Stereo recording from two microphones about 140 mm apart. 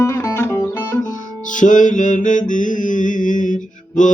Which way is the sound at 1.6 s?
65° left (ahead or behind).